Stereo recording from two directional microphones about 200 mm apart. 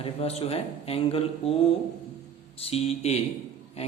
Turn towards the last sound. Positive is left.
turn(degrees=30)  # may be behind; listen again after turning